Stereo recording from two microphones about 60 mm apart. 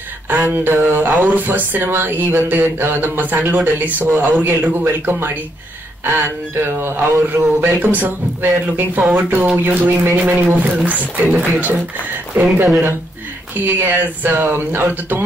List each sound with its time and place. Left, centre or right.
0.3 s speech: right
11.2 s speech: centre
13.7 s speech: right